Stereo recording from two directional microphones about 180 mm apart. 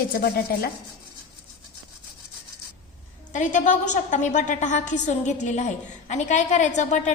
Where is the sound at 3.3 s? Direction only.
45° left (ahead or behind).